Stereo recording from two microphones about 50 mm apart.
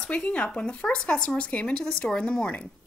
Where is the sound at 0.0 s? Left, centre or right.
Left.